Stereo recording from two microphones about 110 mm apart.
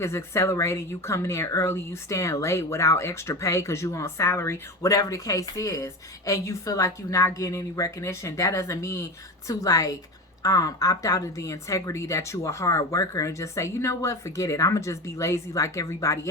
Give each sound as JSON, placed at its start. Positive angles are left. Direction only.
{"t": 0.0, "sound": "a woman's voice", "side_deg": 25}